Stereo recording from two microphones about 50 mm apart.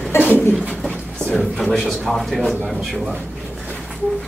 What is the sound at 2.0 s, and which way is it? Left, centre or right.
Speech, centre.